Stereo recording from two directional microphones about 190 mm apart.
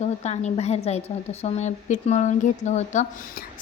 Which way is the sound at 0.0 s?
35° left (ahead or behind).